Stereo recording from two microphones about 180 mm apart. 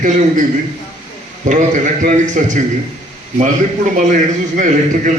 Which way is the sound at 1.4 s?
45° right (ahead or behind).